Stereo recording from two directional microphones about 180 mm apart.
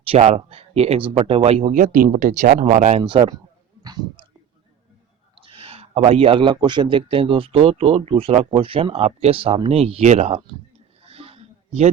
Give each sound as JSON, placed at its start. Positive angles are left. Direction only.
{"t": 0.0, "sound": "a man's voice", "side_deg": -35}
{"t": 3.0, "sound": "speech", "side_deg": -25}
{"t": 5.4, "sound": "a man's voice", "side_deg": -30}
{"t": 11.0, "sound": "a sound", "side_deg": -35}